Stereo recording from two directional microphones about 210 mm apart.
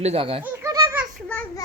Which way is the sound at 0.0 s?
30° right (ahead or behind).